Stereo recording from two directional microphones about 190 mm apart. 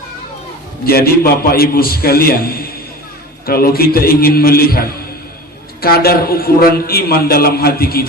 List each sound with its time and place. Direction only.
0.9 s a man's voice: 55° left (ahead or behind)